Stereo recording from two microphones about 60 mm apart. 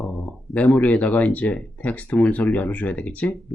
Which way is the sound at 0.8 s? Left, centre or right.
Left.